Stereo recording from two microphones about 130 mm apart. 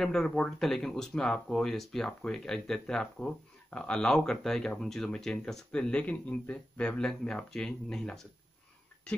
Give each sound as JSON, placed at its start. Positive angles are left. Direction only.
{"t": 0.0, "sound": "speech", "side_deg": 5}